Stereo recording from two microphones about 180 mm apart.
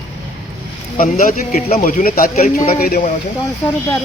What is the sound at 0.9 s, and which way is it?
Speech, 45° left (ahead or behind).